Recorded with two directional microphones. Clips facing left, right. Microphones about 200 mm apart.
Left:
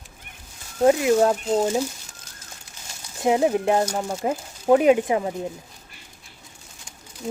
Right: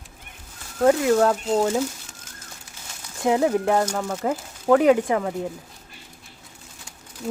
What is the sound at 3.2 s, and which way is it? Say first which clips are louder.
Speech: even; 20° left (ahead or behind).